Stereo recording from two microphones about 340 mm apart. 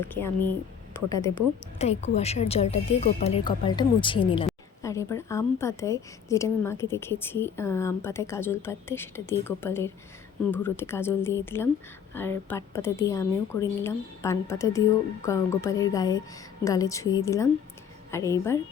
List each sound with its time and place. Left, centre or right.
0.1 s a woman's voice: centre
1.8 s a woman's voice: centre